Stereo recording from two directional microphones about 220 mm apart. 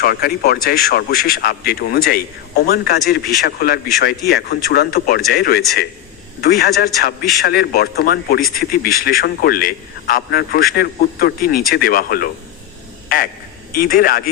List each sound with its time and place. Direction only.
0.0 s a man's voice: 45° left (ahead or behind)